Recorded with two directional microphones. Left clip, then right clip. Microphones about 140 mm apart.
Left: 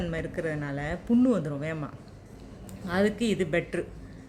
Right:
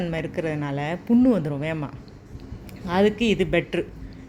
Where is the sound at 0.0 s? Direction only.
15° right (ahead or behind).